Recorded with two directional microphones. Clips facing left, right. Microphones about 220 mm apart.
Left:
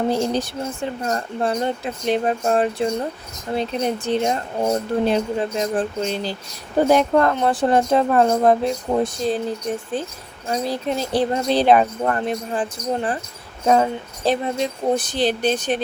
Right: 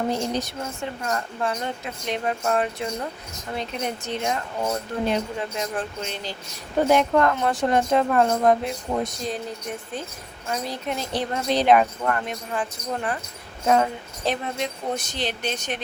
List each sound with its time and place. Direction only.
0.1 s speech: 30° left (ahead or behind)
10.5 s speech: 35° left (ahead or behind)